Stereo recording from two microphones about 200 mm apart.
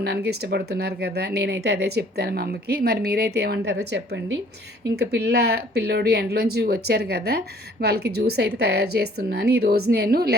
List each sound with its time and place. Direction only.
0.0 s speech: 55° right (ahead or behind)